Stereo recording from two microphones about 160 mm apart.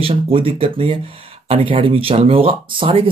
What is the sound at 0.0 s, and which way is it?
Speech, 35° right (ahead or behind).